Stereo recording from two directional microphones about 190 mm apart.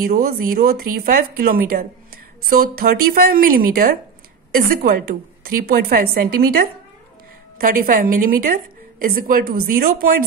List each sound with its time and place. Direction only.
0.0 s speech: 50° right (ahead or behind)